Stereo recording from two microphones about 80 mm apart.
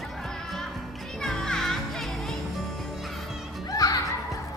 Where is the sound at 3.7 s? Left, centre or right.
Left.